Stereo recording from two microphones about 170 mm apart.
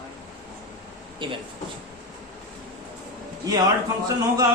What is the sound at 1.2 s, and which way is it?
Speech, 30° right (ahead or behind).